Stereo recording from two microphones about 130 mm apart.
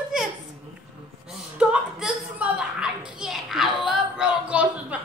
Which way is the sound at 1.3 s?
5° right (ahead or behind).